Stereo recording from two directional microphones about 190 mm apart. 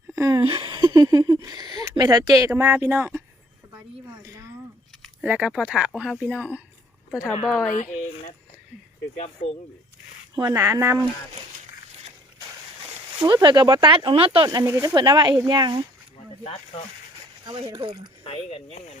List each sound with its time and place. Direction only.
0.1 s speech: 20° right (ahead or behind)
3.8 s a sound: 15° right (ahead or behind)
5.2 s speech: 5° right (ahead or behind)
10.3 s speech: 15° right (ahead or behind)
13.2 s speech: 25° right (ahead or behind)
17.4 s speech: 25° right (ahead or behind)
18.2 s speech: 30° left (ahead or behind)